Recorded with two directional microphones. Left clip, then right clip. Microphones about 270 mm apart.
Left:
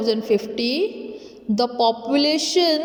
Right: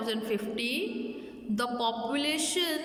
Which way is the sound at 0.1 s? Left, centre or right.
Centre.